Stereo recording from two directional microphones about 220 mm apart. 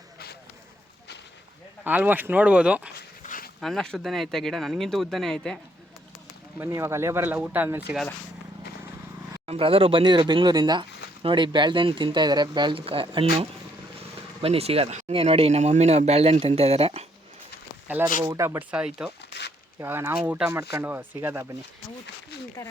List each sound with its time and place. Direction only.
1.8 s speech: 10° right (ahead or behind)
2.9 s dog: 40° left (ahead or behind)
3.6 s speech: centre (ahead or behind)
6.6 s speech: 10° right (ahead or behind)
9.5 s speech: 25° right (ahead or behind)
17.8 s speech: 10° right (ahead or behind)
19.3 s a sound: 50° left (ahead or behind)
19.8 s speech: 10° right (ahead or behind)